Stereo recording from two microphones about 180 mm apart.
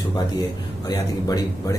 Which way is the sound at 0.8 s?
20° left (ahead or behind).